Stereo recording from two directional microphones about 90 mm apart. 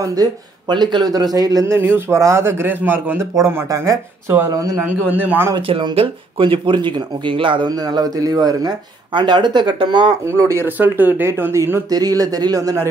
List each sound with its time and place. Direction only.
0.0 s speech: 45° right (ahead or behind)
1.7 s speech: 25° right (ahead or behind); by 4.7 s 40° right (ahead or behind)
4.8 s speech: 20° right (ahead or behind)
5.6 s speech: 70° right (ahead or behind)
7.7 s speech: 45° right (ahead or behind)
10.2 s speech: 30° right (ahead or behind)
10.8 s speech: 20° right (ahead or behind)
11.9 s speech: 45° right (ahead or behind)